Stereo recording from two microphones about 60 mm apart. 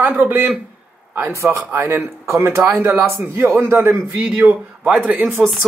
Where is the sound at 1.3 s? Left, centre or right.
Right.